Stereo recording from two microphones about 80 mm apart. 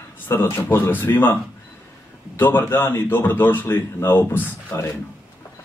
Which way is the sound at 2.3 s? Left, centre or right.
Left.